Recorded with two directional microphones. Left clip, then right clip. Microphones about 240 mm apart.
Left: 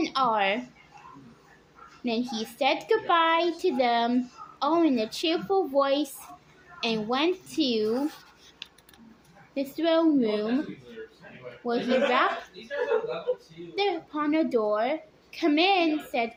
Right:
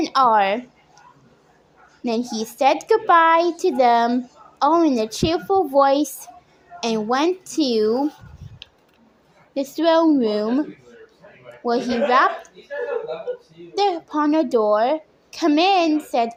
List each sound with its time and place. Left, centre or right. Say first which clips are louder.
0.0 s speech: right 9 dB; right
2.0 s a woman's voice: right 6 dB; right
9.6 s a woman's voice: right 7 dB; right
11.6 s a woman's voice: right 5 dB; right
13.7 s a woman's voice: right 8 dB; right